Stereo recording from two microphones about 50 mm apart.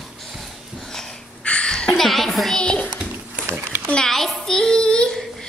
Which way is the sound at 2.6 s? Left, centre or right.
Left.